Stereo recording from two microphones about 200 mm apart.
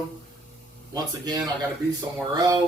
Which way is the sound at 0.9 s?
20° right (ahead or behind).